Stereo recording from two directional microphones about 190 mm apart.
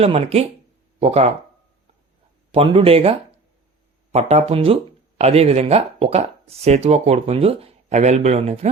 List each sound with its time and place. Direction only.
0.0 s speech: 30° right (ahead or behind)
2.5 s speech: 30° right (ahead or behind)